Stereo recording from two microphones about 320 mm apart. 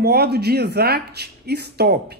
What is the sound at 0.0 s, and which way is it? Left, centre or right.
Speech, right.